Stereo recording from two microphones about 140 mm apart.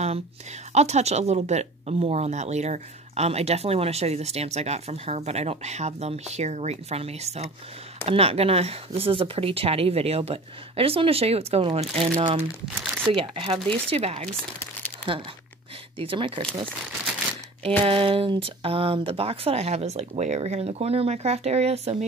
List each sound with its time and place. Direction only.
0.7 s speech: 50° right (ahead or behind)
16.0 s speech: 40° right (ahead or behind)
17.6 s speech: 40° right (ahead or behind)